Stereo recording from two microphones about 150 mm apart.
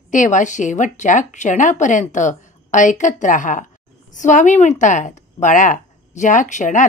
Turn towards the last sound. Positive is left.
turn(degrees=55)  # may be behind; listen again after turning